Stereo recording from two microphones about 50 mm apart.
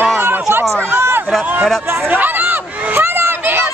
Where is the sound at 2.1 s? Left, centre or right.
Right.